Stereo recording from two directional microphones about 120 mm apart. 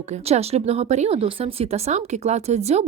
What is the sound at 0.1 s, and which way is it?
Speech, 60° right (ahead or behind).